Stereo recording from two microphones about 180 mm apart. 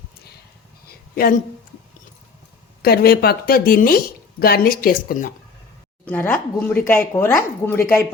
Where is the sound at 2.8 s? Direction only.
60° left (ahead or behind).